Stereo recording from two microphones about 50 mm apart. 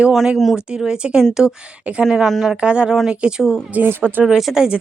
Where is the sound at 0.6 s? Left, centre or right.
Centre.